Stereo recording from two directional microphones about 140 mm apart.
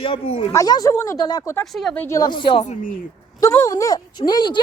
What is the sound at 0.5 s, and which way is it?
Speech, 25° left (ahead or behind).